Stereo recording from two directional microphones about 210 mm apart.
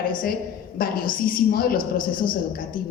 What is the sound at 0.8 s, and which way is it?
A woman's voice, 45° left (ahead or behind).